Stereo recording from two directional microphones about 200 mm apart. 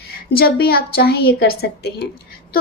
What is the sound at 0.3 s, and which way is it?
A woman's voice, 50° left (ahead or behind).